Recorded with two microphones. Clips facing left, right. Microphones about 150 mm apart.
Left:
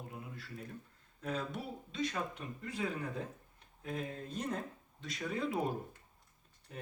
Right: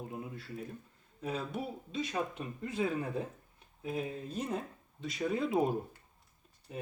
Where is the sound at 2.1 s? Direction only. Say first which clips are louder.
Right 4 dB; 25° right (ahead or behind).